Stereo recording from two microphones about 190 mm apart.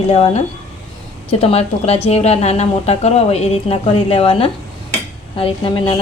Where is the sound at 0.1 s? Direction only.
30° left (ahead or behind).